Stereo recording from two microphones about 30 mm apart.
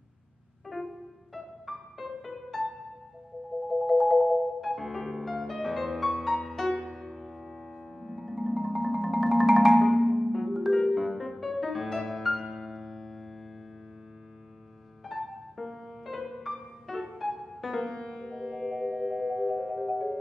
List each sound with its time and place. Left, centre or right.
0.7 s music: centre
3.6 s music: centre
9.8 s marimba: centre
10.7 s music: centre
15.0 s music: centre
17.8 s music: centre
18.4 s music: centre